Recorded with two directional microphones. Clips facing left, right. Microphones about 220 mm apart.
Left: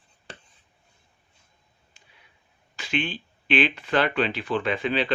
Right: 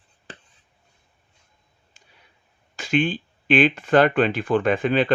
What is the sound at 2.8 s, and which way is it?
Speech, 45° right (ahead or behind).